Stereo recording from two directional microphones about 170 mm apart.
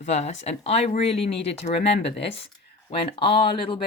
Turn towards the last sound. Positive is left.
turn(degrees=30)  # may be behind; listen again after turning